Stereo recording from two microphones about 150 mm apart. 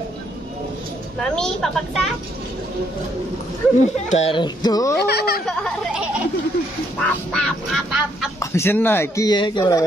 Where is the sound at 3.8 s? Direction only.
50° left (ahead or behind).